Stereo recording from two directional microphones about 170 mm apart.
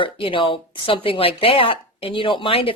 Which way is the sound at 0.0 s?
30° left (ahead or behind).